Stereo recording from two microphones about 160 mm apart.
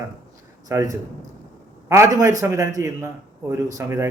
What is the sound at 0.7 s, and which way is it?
A man's voice, 20° right (ahead or behind).